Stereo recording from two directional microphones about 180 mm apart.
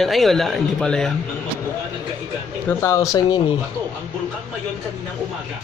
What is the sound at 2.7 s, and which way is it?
Speech, 15° left (ahead or behind).